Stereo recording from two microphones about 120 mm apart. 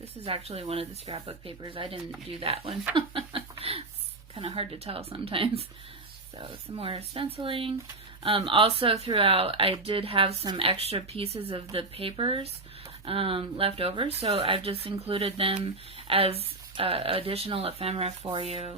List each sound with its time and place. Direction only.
0.0 s speech: 55° right (ahead or behind)
3.6 s a sound: 55° right (ahead or behind)
4.4 s speech: 50° right (ahead or behind)